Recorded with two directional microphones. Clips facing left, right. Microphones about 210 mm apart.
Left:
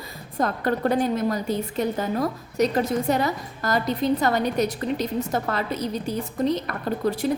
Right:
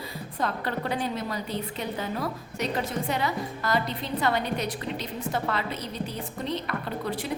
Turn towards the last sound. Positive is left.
turn(degrees=45)  # may be behind; listen again after turning